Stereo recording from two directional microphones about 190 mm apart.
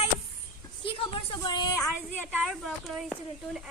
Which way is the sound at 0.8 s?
25° left (ahead or behind).